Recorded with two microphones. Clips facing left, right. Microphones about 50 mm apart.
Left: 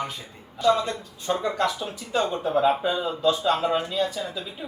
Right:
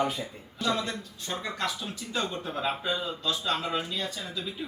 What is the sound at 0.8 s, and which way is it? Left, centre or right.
Speech, centre.